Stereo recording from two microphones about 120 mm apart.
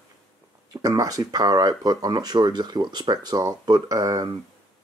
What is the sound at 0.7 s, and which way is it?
Speech, 30° right (ahead or behind).